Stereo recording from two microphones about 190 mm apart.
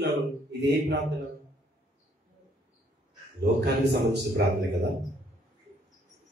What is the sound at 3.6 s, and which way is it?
Speech, 60° right (ahead or behind).